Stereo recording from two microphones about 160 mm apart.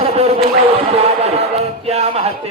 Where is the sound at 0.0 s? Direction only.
40° right (ahead or behind).